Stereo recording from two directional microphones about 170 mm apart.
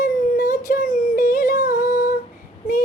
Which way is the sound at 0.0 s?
50° left (ahead or behind).